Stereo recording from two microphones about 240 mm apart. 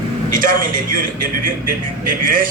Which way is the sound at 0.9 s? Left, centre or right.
Right.